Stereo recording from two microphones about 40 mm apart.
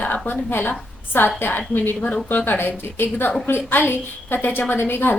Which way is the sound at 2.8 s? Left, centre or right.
Left.